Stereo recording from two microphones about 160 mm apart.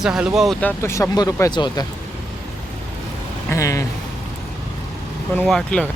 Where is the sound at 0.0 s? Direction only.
5° right (ahead or behind).